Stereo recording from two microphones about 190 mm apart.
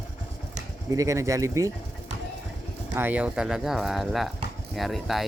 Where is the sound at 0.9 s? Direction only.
15° right (ahead or behind).